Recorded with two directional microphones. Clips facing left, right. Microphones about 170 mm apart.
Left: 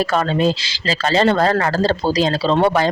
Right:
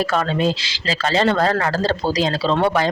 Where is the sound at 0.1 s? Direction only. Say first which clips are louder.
Left 2 dB; 35° left (ahead or behind).